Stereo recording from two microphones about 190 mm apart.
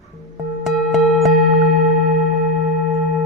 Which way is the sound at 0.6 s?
Centre (ahead or behind).